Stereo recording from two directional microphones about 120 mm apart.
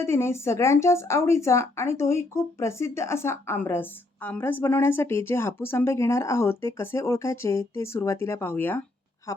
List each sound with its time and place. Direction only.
0.0 s speech: 20° left (ahead or behind)